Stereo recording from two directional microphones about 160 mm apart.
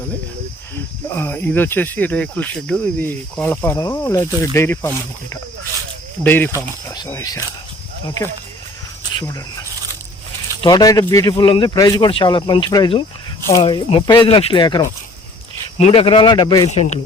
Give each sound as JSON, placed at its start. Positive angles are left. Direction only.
{"t": 1.1, "sound": "speech", "side_deg": 15}
{"t": 9.1, "sound": "a man's voice", "side_deg": 20}
{"t": 16.6, "sound": "speech", "side_deg": 45}